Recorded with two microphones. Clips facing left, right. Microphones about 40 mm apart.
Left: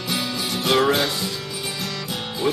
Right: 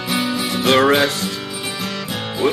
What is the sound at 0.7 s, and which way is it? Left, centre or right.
Music, right.